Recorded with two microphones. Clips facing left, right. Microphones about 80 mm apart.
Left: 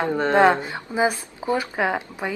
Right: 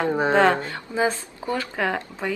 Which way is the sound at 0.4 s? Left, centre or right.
Centre.